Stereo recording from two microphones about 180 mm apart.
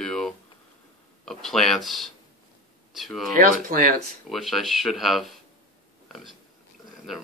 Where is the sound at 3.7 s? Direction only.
50° right (ahead or behind).